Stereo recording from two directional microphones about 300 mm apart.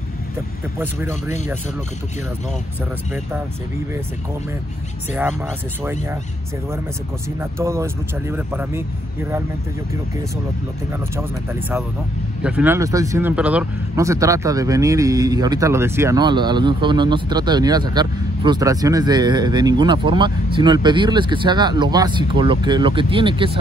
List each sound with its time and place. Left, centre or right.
0.7 s speech: centre
7.5 s speech: centre
12.4 s speech: centre